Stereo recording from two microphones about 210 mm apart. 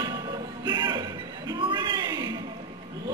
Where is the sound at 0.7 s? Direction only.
20° right (ahead or behind).